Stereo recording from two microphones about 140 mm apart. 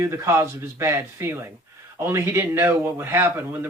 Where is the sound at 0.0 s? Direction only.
20° right (ahead or behind).